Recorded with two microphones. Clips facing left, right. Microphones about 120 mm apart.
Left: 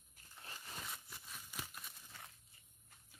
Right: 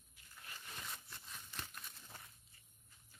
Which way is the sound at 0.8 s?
5° left (ahead or behind).